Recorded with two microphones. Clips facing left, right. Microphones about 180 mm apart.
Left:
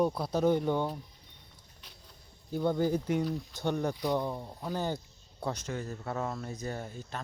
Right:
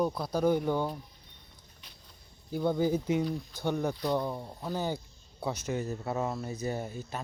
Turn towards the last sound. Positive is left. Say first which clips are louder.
# right 3 dB
turn(degrees=-10)  # may be behind; listen again after turning